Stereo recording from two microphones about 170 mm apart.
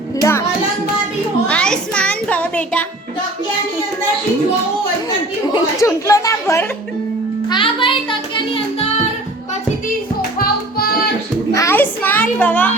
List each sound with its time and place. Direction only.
0.2 s music: 15° left (ahead or behind)
1.5 s music: 5° left (ahead or behind)
5.5 s speech: 20° left (ahead or behind)
7.5 s a child's voice: 30° left (ahead or behind)
10.2 s music: 65° left (ahead or behind)
11.5 s a sound: 15° left (ahead or behind)